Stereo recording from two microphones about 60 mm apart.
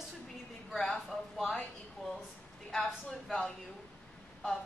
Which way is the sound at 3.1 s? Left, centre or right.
Centre.